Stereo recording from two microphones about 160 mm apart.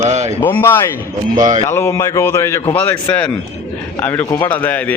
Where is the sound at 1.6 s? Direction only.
15° left (ahead or behind).